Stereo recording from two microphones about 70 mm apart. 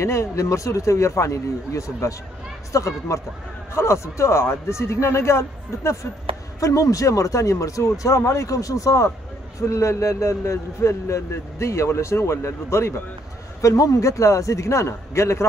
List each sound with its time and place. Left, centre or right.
0.0 s a man's voice: left
6.6 s a man's voice: left
13.6 s a man's voice: left